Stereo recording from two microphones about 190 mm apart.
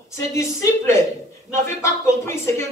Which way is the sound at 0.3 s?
15° left (ahead or behind).